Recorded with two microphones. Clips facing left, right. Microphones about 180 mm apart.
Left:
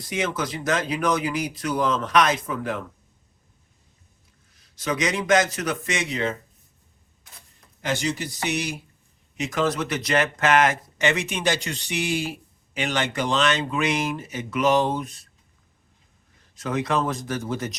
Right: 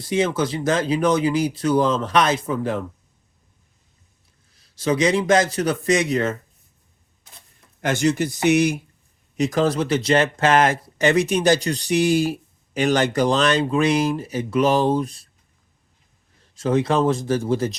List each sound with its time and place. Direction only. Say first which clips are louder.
0.0 s speech: right 6 dB; 30° right (ahead or behind)
4.7 s speech: right 7 dB; 30° right (ahead or behind); by 6.3 s 45° right (ahead or behind)
7.8 s speech: right 6 dB; 55° right (ahead or behind)
9.4 s speech: right 5 dB; 35° right (ahead or behind)
16.6 s speech: right 6 dB; 30° right (ahead or behind)